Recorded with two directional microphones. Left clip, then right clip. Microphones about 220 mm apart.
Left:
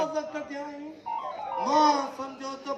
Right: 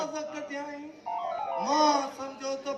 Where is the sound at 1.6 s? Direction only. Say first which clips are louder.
Left 3 dB; 45° left (ahead or behind).